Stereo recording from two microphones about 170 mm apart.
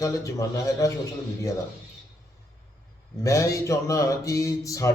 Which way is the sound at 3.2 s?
20° left (ahead or behind).